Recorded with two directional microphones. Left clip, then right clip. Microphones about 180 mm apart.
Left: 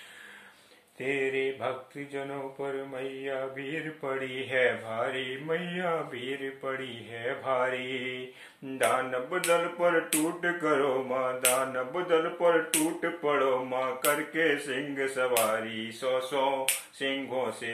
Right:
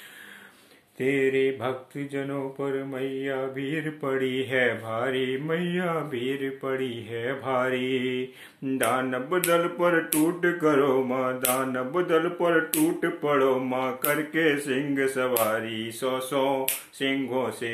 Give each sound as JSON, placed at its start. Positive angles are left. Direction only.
{"t": 0.9, "sound": "mantra", "side_deg": -45}